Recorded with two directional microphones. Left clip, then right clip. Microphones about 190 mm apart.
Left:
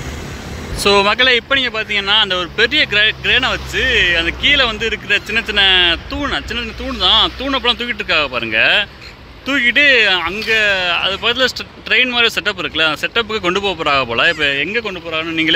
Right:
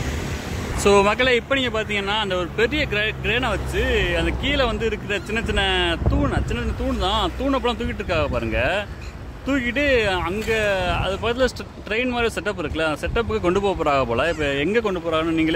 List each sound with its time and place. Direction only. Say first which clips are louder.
0.7 s speech: left 5 dB; 5° right (ahead or behind)
14.6 s speech: left 2 dB; 20° right (ahead or behind)